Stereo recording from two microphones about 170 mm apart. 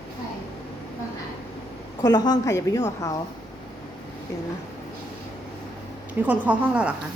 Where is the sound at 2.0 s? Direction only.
25° left (ahead or behind).